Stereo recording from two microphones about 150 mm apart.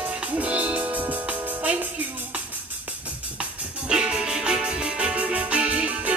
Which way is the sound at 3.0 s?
10° right (ahead or behind).